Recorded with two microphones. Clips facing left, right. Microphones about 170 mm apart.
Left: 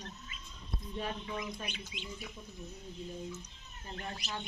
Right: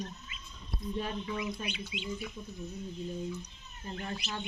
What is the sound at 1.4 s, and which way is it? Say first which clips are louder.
Speech: right 5 dB; 45° left (ahead or behind).